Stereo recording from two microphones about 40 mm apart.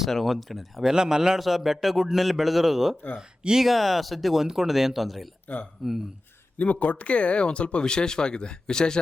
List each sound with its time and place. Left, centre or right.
0.1 s a man's voice: centre
0.9 s speech: centre
1.4 s a man's voice: centre
3.6 s a man's voice: centre
6.6 s speech: left; by 9.0 s centre